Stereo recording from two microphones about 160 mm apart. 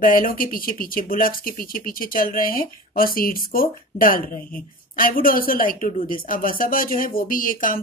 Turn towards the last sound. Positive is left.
turn(degrees=60)  # may be behind; listen again after turning